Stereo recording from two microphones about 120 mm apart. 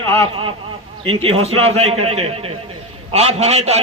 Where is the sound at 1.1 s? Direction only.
50° right (ahead or behind).